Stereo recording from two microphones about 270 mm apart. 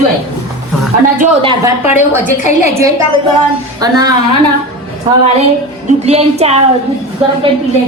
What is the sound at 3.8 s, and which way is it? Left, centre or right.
Speech, centre.